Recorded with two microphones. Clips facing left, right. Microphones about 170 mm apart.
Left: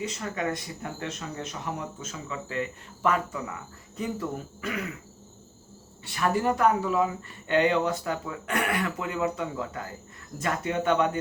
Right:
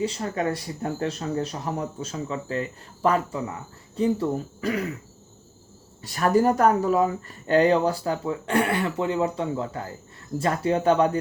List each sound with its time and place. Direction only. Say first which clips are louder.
0.0 s speech: right 5 dB; 30° right (ahead or behind)
6.1 s speech: right 5 dB; 40° right (ahead or behind)